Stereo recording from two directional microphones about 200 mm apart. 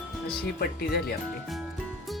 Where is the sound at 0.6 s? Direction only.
50° left (ahead or behind).